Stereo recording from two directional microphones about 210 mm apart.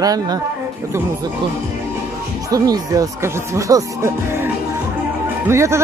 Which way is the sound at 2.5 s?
15° right (ahead or behind).